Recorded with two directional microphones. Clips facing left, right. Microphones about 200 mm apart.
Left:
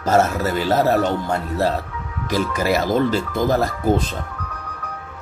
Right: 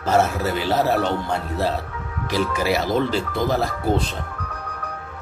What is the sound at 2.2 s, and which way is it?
Speech, 45° left (ahead or behind).